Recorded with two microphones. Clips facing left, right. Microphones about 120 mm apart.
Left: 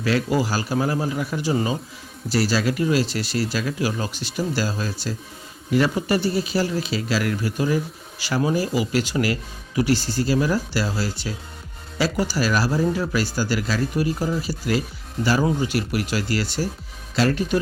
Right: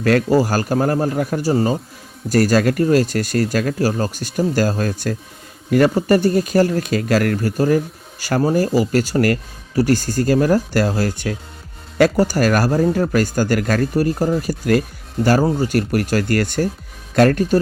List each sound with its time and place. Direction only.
0.0 s speech: 50° right (ahead or behind)